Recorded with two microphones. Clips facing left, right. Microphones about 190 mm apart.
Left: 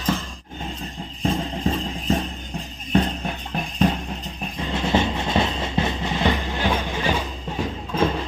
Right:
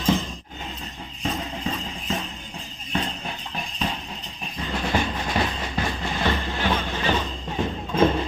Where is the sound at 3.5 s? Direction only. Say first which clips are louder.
Left 9 dB; 45° left (ahead or behind).